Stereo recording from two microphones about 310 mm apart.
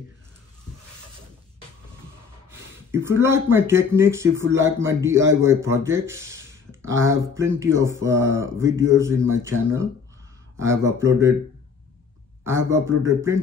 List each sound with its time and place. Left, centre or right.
2.9 s speech: centre
12.4 s speech: centre